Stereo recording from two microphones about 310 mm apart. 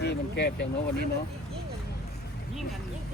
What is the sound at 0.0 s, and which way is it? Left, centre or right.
Speech, left.